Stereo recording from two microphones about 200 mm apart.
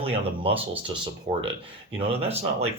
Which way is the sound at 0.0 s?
30° right (ahead or behind).